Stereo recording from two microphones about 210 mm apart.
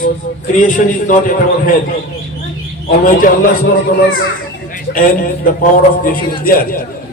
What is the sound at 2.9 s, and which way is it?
Speech, 40° left (ahead or behind).